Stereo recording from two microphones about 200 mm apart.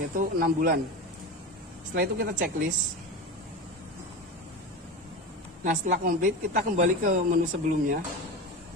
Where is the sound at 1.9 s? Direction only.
50° right (ahead or behind).